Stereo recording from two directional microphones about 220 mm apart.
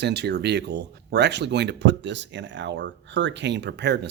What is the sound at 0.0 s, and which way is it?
Speech, 50° right (ahead or behind).